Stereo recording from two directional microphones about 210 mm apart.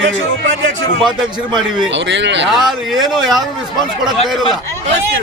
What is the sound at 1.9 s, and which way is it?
Speech, 60° right (ahead or behind).